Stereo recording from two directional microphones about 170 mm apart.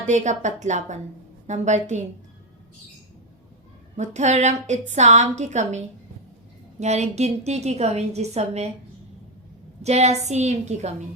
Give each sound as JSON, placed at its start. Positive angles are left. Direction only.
{"t": 0.0, "sound": "a woman's voice", "side_deg": -45}
{"t": 3.9, "sound": "a woman's voice", "side_deg": -45}
{"t": 9.8, "sound": "a woman's voice", "side_deg": -40}